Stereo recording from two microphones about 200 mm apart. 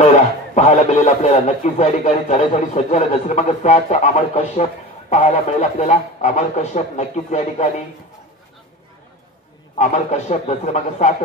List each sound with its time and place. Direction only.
0.0 s a man's voice: 35° left (ahead or behind)
9.8 s a man's voice: 35° left (ahead or behind)